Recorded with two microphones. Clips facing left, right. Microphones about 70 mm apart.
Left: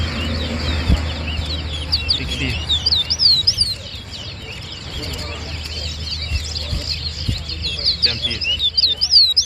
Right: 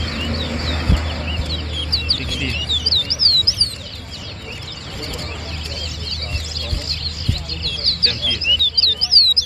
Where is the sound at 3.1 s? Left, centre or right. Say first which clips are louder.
Even; right.